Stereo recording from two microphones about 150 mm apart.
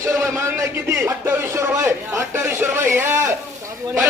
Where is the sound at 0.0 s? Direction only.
20° right (ahead or behind).